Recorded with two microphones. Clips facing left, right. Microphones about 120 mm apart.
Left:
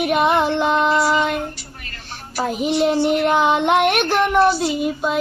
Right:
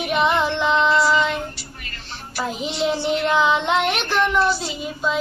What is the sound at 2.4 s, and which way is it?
Child singing, 50° left (ahead or behind).